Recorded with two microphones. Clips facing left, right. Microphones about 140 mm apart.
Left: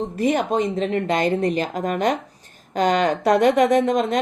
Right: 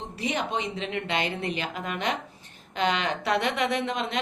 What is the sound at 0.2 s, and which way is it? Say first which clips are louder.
Speech: left 9 dB; 45° left (ahead or behind).